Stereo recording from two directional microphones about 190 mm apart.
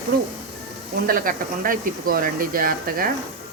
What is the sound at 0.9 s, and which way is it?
Speech, 50° right (ahead or behind).